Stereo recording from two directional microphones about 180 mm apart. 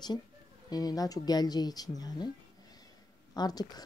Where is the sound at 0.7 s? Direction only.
20° left (ahead or behind).